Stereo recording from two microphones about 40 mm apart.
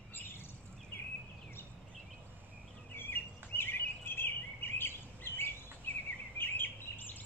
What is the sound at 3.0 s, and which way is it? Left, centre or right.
Bird vocalization, left.